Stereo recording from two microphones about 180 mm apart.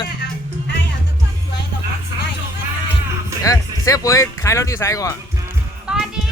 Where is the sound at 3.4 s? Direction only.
20° left (ahead or behind).